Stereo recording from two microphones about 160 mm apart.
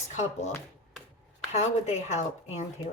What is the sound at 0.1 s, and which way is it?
Speech, 45° left (ahead or behind).